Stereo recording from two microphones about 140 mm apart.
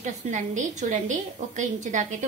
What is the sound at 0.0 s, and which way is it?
A woman's voice, 60° right (ahead or behind).